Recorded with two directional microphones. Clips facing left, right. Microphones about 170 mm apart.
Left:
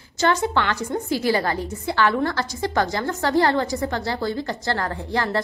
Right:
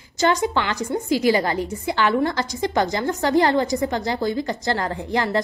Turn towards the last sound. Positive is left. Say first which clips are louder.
# right 2 dB
turn(degrees=-15)  # may be behind; listen again after turning